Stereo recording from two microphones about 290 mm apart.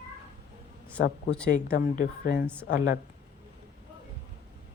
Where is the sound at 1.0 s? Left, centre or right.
Left.